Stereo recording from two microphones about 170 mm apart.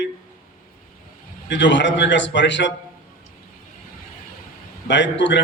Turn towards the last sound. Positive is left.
turn(degrees=90)